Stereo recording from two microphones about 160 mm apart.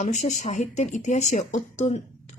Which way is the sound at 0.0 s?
50° left (ahead or behind).